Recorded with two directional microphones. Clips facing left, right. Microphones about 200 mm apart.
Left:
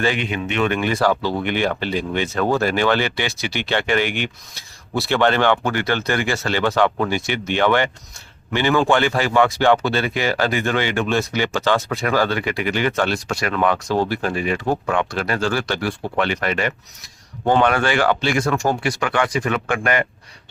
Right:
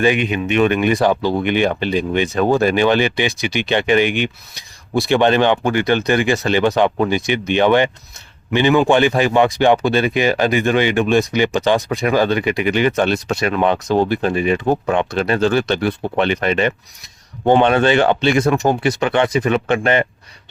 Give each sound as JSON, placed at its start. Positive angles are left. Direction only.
{"t": 0.0, "sound": "speech", "side_deg": -15}